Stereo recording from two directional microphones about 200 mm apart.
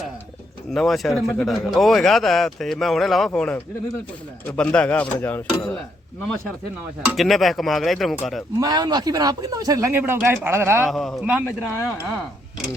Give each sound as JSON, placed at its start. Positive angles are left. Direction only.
{"t": 0.7, "sound": "speech", "side_deg": 0}
{"t": 7.1, "sound": "speech", "side_deg": 0}
{"t": 8.6, "sound": "speech", "side_deg": -20}
{"t": 10.8, "sound": "speech", "side_deg": 0}
{"t": 11.4, "sound": "speech", "side_deg": 10}